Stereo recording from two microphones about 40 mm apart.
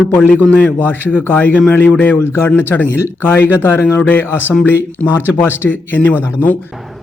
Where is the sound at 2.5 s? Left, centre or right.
Left.